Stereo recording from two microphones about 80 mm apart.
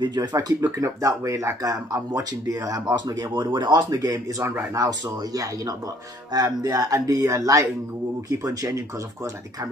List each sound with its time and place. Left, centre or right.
0.0 s speech: right
0.6 s speech: right
3.3 s speech: right
3.9 s speech: right